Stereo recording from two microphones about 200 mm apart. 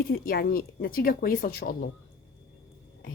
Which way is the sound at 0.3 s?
50° left (ahead or behind).